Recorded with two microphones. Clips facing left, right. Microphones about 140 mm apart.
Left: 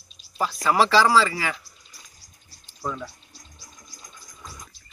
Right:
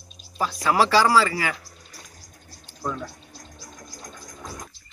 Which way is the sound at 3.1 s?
70° right (ahead or behind).